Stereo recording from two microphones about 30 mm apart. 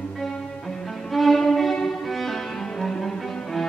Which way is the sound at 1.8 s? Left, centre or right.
Centre.